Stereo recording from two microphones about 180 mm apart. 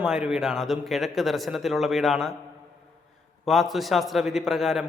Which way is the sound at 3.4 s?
Centre (ahead or behind).